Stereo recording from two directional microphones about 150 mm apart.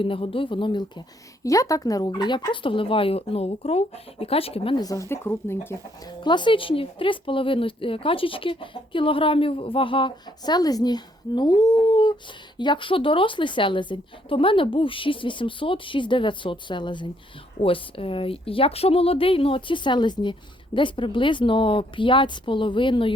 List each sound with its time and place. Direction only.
0.0 s speech: 35° left (ahead or behind)
4.8 s speech: 20° left (ahead or behind)
6.1 s speech: 30° left (ahead or behind)